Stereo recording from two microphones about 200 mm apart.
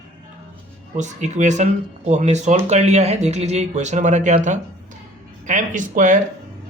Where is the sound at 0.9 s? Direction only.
35° right (ahead or behind).